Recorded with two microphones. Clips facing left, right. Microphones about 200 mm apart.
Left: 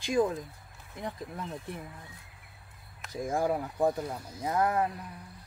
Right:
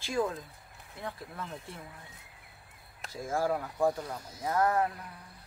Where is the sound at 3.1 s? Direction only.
20° left (ahead or behind).